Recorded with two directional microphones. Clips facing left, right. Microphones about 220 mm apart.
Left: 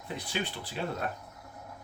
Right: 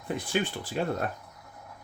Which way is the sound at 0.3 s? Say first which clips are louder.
Right 5 dB; 50° right (ahead or behind).